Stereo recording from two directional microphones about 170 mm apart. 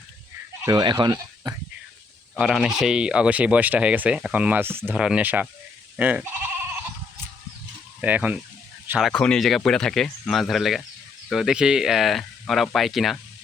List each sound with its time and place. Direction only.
0.6 s speech: 25° right (ahead or behind)
2.4 s speech: centre (ahead or behind)
8.0 s speech: 10° right (ahead or behind)